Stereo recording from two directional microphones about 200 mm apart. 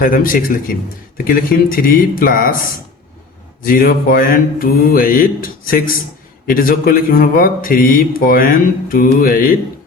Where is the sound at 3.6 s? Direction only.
45° left (ahead or behind).